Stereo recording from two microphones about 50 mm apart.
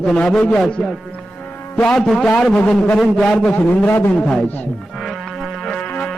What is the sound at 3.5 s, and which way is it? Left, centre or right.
Speech, left.